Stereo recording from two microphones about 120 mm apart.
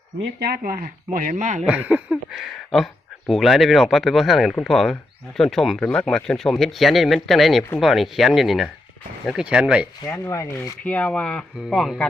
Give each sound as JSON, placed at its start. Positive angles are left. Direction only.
{"t": 1.2, "sound": "speech", "side_deg": -90}
{"t": 1.6, "sound": "speech", "side_deg": -10}
{"t": 10.1, "sound": "speech", "side_deg": 25}
{"t": 10.8, "sound": "speech", "side_deg": 10}